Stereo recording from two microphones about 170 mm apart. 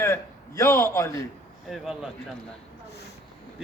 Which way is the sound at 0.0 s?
15° left (ahead or behind).